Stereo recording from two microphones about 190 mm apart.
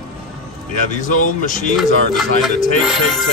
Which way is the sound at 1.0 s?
45° left (ahead or behind).